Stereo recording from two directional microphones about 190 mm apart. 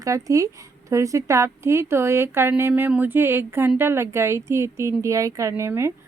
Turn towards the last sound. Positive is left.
turn(degrees=-15)  # may be behind; listen again after turning